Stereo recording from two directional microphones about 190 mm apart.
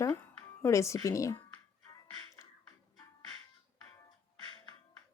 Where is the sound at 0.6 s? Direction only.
15° left (ahead or behind).